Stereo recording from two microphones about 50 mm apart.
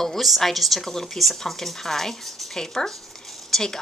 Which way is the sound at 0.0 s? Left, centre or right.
Centre.